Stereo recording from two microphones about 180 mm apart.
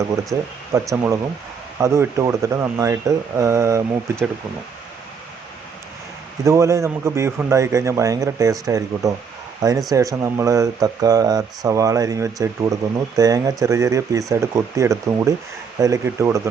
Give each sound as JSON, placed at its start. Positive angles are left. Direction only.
{"t": 0.3, "sound": "speech", "side_deg": -20}
{"t": 6.4, "sound": "speech", "side_deg": -15}